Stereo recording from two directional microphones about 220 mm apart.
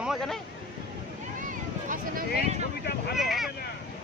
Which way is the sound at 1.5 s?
35° right (ahead or behind).